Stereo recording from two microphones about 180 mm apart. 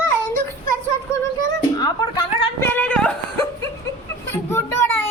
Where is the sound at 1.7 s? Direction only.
25° left (ahead or behind).